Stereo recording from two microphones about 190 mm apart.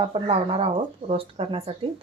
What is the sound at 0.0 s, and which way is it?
Speech, 30° right (ahead or behind).